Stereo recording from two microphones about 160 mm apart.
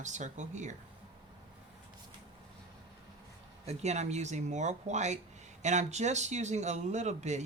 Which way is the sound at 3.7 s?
45° right (ahead or behind).